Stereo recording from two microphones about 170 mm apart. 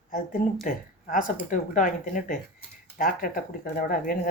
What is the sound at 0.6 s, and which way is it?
Speech, 50° left (ahead or behind).